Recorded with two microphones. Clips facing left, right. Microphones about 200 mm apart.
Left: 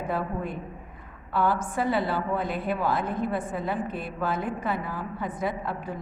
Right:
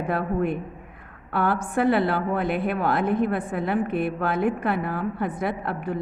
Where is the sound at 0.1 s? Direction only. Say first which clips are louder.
Right 7 dB; 65° right (ahead or behind).